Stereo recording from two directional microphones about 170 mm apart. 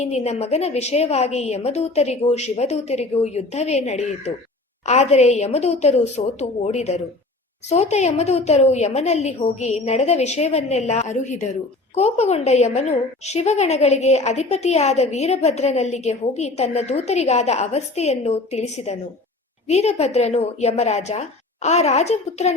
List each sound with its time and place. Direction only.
0.0 s a woman's voice: 40° left (ahead or behind)